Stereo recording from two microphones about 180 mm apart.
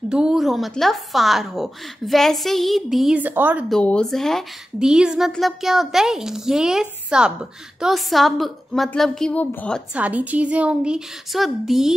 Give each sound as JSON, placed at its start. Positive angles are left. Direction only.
{"t": 0.1, "sound": "a woman's voice", "side_deg": -5}
{"t": 3.7, "sound": "a woman's voice", "side_deg": 5}
{"t": 9.9, "sound": "a woman's voice", "side_deg": -10}